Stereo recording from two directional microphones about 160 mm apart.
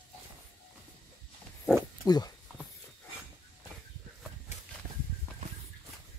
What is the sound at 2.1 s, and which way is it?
Speech, 25° left (ahead or behind).